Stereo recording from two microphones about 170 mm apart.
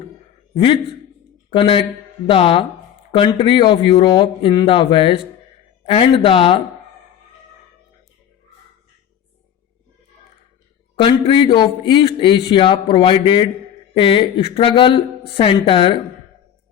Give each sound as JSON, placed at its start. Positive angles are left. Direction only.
{"t": 0.5, "sound": "a woman's voice", "side_deg": 30}
{"t": 11.0, "sound": "a man's voice", "side_deg": 30}